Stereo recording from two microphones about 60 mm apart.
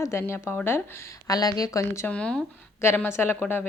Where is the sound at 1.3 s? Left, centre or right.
Left.